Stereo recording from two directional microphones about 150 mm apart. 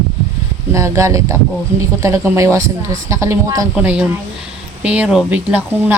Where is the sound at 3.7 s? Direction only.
10° right (ahead or behind).